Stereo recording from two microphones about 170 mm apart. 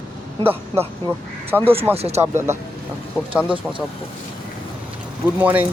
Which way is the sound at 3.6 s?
5° right (ahead or behind).